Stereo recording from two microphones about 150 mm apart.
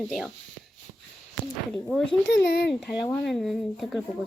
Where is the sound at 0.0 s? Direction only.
Centre (ahead or behind).